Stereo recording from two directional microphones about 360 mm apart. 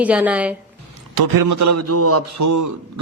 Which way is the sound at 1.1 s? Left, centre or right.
Right.